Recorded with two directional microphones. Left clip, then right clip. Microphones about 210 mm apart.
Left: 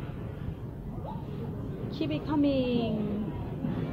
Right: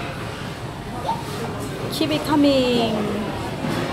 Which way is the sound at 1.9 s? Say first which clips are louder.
Right 10 dB; 15° right (ahead or behind).